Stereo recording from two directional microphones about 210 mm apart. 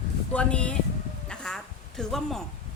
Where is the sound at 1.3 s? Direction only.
5° left (ahead or behind).